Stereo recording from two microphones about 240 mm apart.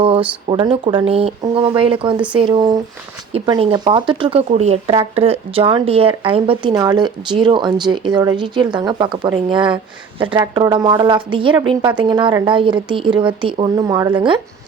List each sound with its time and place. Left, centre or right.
0.4 s speech: centre